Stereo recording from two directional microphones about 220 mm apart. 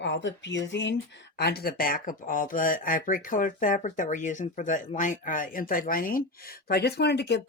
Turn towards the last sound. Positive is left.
turn(degrees=50)  # may be behind; listen again after turning